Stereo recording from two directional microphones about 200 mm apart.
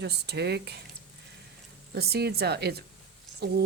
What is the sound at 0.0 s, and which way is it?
Speech, 55° right (ahead or behind).